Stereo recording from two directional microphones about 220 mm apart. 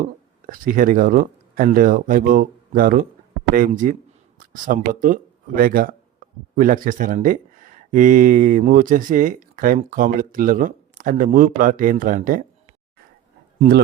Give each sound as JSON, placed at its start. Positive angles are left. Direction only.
{"t": 0.0, "sound": "speech", "side_deg": -35}
{"t": 13.6, "sound": "speech", "side_deg": -45}